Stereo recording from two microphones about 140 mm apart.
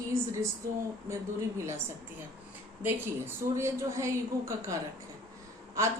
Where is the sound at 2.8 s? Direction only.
15° right (ahead or behind).